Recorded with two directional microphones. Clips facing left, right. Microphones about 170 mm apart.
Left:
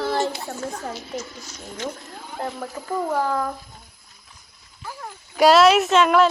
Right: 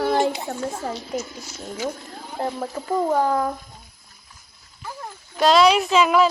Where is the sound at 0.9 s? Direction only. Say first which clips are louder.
Right 3 dB; 5° right (ahead or behind).